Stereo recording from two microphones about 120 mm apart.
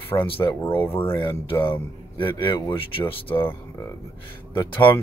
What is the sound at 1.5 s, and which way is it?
Speech, 15° left (ahead or behind).